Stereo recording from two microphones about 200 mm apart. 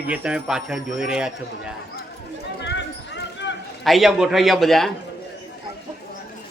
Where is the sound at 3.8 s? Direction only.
Centre (ahead or behind).